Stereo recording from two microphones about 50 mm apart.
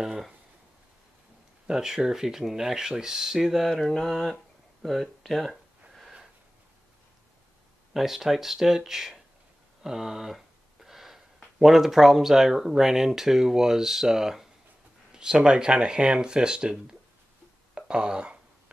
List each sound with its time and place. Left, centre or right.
0.0 s speech: centre
1.7 s speech: centre
3.5 s mantra: centre
4.8 s speech: centre
7.9 s speech: centre
9.8 s a sound: centre
11.6 s speech: centre